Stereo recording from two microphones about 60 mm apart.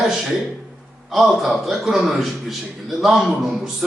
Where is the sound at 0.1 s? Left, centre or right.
Centre.